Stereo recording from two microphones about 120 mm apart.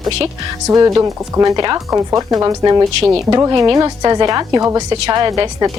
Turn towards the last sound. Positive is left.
turn(degrees=-35)  # may be behind; listen again after turning